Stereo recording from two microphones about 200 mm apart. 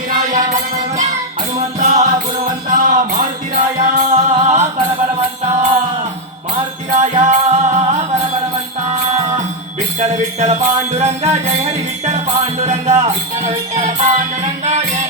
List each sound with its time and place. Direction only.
0.3 s music: 40° right (ahead or behind)
7.0 s music: 35° right (ahead or behind)
9.1 s music: 35° right (ahead or behind)